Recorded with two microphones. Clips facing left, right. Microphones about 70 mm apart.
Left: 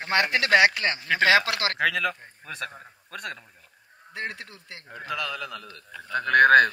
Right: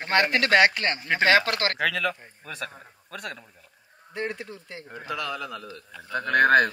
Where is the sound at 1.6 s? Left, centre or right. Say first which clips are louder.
Even; centre.